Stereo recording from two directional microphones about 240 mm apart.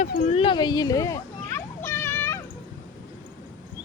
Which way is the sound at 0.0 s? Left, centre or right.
Left.